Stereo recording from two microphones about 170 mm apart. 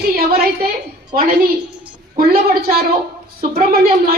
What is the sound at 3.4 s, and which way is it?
Speech, 60° right (ahead or behind).